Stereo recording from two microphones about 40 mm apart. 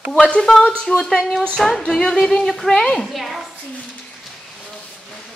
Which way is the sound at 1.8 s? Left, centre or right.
Centre.